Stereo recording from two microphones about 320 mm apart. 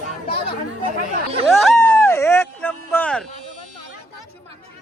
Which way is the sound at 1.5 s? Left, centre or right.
Centre.